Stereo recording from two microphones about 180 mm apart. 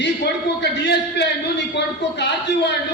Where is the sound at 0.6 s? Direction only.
70° left (ahead or behind).